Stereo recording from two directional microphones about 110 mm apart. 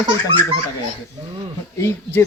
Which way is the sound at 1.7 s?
25° left (ahead or behind).